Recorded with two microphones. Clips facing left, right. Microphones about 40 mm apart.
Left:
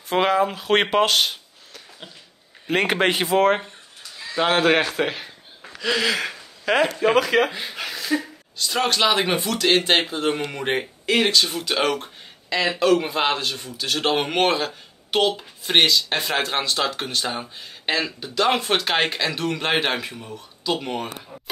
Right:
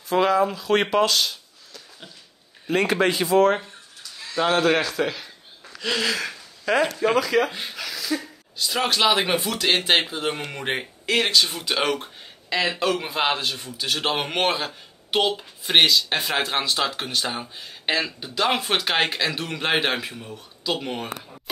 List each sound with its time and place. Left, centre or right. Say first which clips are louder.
0.1 s speech: even; left
2.7 s a man's voice: left 1 dB; left
3.0 s speech: left 1 dB; left
3.3 s speech: right 2 dB; left
5.8 s a sound: left 3 dB; centre
6.1 s a sound: left 2 dB; left
7.2 s speech: left 3 dB; left
7.7 s a sound: left 3 dB; left
8.5 s speech: left 1 dB; centre